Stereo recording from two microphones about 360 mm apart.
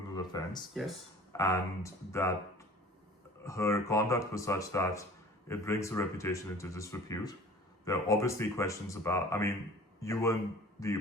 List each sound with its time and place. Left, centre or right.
0.2 s speech: centre
0.7 s speech: centre